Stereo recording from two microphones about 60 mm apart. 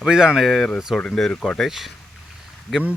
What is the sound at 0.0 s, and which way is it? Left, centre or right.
Speech, centre.